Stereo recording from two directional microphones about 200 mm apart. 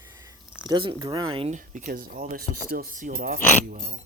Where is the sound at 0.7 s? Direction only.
20° right (ahead or behind); by 3.9 s 45° right (ahead or behind).